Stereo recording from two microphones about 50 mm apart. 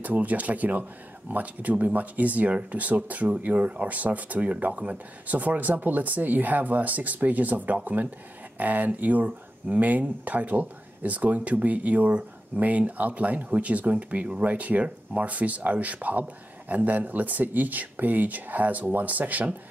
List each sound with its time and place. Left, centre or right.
0.0 s speech: right